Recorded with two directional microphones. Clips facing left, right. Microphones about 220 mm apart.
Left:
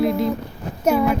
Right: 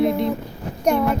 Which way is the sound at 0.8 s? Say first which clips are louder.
Left 1 dB; 5° left (ahead or behind).